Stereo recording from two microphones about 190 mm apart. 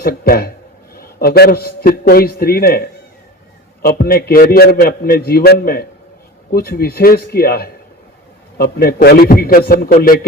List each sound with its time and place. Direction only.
0.0 s a man's voice: 50° left (ahead or behind)